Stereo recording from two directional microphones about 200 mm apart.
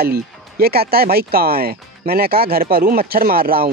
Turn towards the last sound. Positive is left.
turn(degrees=-50)  # may be behind; listen again after turning